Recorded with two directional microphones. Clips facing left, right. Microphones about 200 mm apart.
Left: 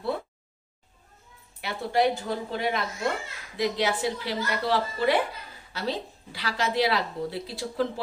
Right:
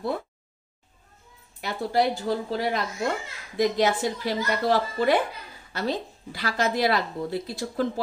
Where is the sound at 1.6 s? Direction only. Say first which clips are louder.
Even; 40° right (ahead or behind).